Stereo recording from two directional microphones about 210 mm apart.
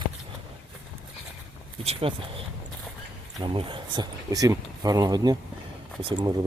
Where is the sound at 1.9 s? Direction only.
25° right (ahead or behind).